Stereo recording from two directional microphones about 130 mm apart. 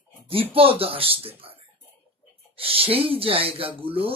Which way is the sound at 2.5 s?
45° right (ahead or behind).